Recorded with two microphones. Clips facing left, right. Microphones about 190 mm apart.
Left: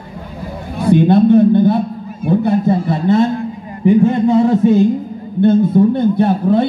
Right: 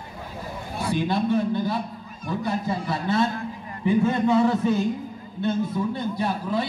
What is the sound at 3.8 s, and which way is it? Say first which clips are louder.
A man's voice: left 9 dB; 20° left (ahead or behind).